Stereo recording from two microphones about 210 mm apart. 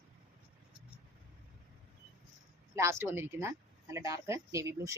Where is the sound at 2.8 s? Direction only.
10° right (ahead or behind).